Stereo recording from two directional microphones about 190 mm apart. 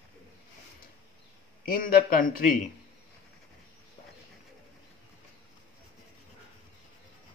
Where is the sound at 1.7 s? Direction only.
50° left (ahead or behind).